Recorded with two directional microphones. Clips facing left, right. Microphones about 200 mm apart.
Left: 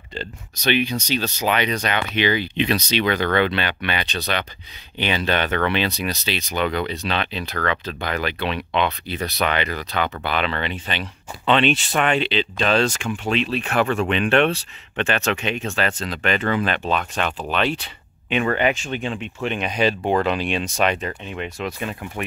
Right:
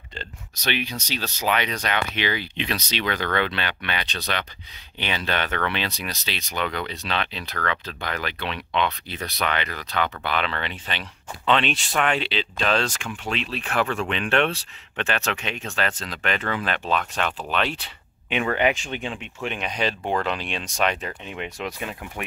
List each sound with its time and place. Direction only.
0.1 s speech: centre (ahead or behind)
21.1 s speech: 15° right (ahead or behind)